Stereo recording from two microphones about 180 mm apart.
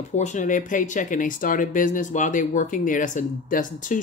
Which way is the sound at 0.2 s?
45° left (ahead or behind).